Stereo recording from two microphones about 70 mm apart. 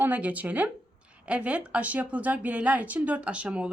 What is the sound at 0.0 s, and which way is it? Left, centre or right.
A woman's voice, right.